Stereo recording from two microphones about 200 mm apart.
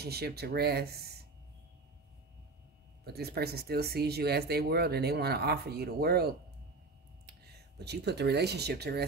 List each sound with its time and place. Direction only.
0.0 s speech: 55° right (ahead or behind)
3.1 s speech: 55° right (ahead or behind)
7.8 s speech: 55° right (ahead or behind)